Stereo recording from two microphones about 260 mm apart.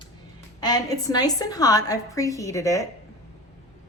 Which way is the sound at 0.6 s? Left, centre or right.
Centre.